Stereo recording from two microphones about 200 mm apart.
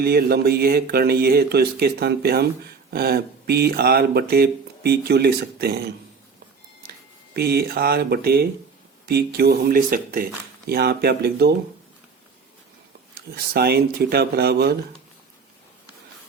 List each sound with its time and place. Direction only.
0.0 s speech: 50° right (ahead or behind)
7.3 s speech: 50° right (ahead or behind)
13.1 s speech: 50° right (ahead or behind)